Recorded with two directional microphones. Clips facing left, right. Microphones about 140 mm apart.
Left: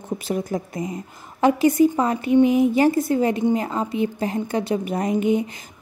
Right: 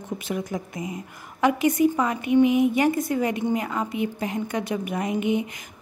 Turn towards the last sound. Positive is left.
turn(degrees=35)  # may be behind; listen again after turning